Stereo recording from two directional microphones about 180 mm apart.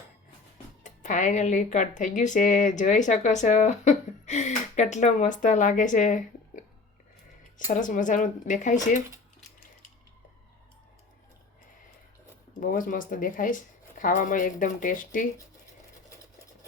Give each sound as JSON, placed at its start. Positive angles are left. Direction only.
{"t": 0.8, "sound": "speech", "side_deg": 45}
{"t": 7.7, "sound": "speech", "side_deg": 45}
{"t": 12.5, "sound": "speech", "side_deg": 50}